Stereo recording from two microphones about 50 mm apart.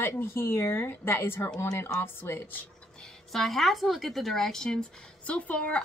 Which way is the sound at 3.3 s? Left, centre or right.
Centre.